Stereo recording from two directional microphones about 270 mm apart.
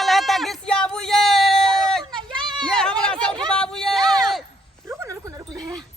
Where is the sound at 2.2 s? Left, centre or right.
Centre.